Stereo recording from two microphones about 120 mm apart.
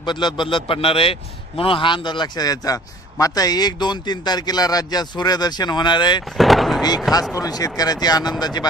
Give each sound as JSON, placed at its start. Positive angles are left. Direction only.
{"t": 0.0, "sound": "a man's voice", "side_deg": 40}
{"t": 6.3, "sound": "a sound", "side_deg": 0}
{"t": 7.3, "sound": "a man's voice", "side_deg": 30}